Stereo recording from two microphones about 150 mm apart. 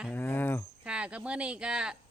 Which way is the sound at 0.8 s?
5° right (ahead or behind).